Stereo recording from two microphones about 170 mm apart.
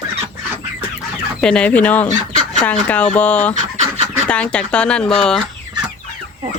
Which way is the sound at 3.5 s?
45° right (ahead or behind).